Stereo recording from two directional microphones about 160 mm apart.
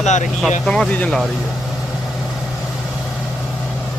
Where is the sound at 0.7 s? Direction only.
5° left (ahead or behind).